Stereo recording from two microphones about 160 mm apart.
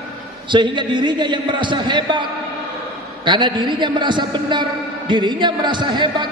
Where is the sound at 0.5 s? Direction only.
30° right (ahead or behind).